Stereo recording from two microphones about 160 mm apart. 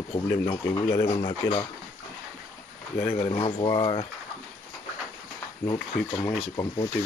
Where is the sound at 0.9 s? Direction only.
30° left (ahead or behind).